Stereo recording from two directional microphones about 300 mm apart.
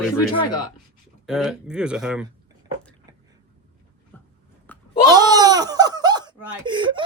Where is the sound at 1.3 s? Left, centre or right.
Centre.